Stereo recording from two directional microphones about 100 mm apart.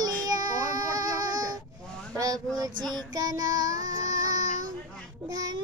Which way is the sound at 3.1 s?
40° right (ahead or behind).